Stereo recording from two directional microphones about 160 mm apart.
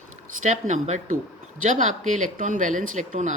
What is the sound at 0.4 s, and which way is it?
Speech, 50° right (ahead or behind).